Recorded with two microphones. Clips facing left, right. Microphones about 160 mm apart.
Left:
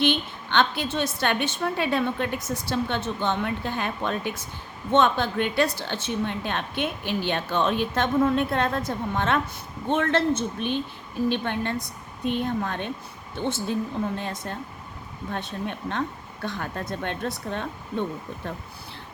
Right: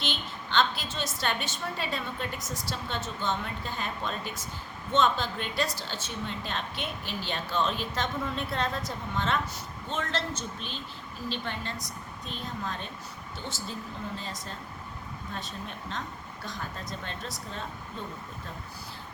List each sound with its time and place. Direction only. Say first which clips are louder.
0.0 s a woman's voice: left 11 dB; 60° left (ahead or behind)